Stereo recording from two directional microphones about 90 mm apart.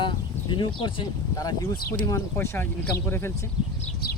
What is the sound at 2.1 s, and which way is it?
Speech, 30° left (ahead or behind).